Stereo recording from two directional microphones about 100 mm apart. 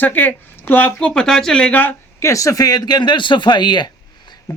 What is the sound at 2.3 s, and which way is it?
A man's voice, 35° left (ahead or behind).